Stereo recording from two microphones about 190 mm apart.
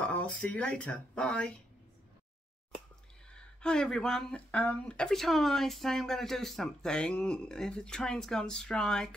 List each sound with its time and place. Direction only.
0.0 s speech: 5° left (ahead or behind)
3.3 s speech: 5° left (ahead or behind)